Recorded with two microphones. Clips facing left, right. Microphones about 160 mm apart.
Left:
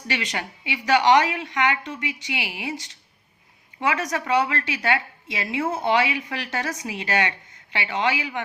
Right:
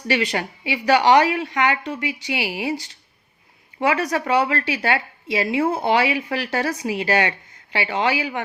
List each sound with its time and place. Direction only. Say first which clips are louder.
0.1 s a woman's voice: right 7 dB; 35° right (ahead or behind)